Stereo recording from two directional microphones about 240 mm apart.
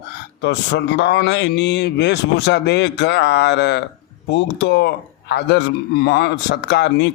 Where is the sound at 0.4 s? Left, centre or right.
Left.